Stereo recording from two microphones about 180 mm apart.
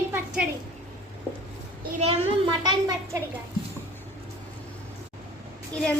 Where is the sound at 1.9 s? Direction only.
35° right (ahead or behind).